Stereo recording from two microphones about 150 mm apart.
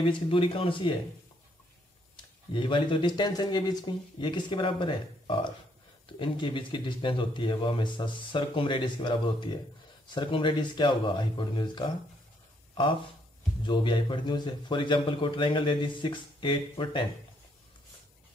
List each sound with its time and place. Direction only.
0.0 s a man's voice: 35° left (ahead or behind)
2.1 s a man's voice: 35° left (ahead or behind)
13.6 s a man's voice: 35° left (ahead or behind)